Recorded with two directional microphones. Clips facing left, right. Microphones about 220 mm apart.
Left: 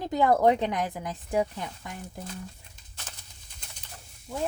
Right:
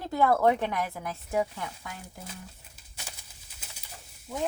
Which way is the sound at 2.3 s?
10° right (ahead or behind).